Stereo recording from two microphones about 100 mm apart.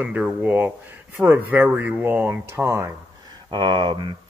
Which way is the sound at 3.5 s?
50° right (ahead or behind).